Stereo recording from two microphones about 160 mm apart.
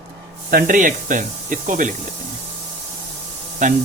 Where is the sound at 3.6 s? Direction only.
50° right (ahead or behind).